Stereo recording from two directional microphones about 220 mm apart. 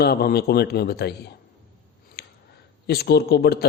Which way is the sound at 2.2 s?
45° left (ahead or behind).